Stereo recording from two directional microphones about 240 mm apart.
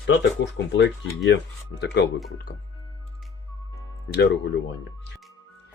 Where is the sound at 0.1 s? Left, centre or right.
Left.